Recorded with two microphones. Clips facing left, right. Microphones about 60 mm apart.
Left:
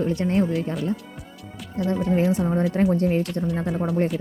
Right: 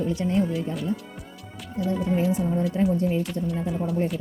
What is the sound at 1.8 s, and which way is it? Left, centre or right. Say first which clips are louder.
Speech: left 3 dB; left.